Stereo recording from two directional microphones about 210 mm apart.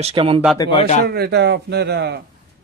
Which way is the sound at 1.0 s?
50° right (ahead or behind).